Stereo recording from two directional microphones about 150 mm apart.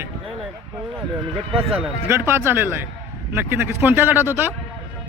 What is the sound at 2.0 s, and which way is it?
Speech, 15° right (ahead or behind).